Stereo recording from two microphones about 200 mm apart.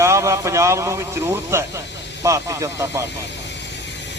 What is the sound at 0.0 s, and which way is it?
Speech, 15° right (ahead or behind).